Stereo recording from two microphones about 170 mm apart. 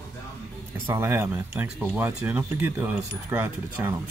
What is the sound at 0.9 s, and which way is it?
Speech, 15° right (ahead or behind).